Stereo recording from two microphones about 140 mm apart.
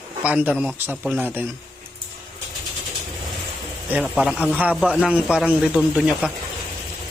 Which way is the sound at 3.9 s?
5° right (ahead or behind).